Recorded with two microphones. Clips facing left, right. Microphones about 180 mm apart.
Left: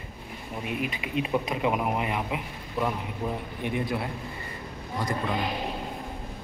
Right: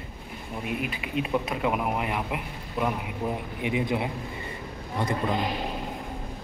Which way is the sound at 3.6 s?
15° right (ahead or behind).